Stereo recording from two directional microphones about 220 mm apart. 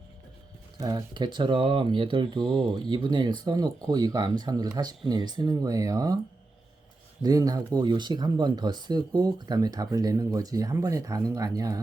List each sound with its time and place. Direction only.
0.8 s speech: 20° right (ahead or behind)
7.2 s speech: 15° right (ahead or behind)